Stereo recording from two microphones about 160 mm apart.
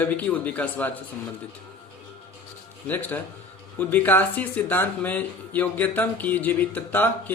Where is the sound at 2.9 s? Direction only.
10° left (ahead or behind).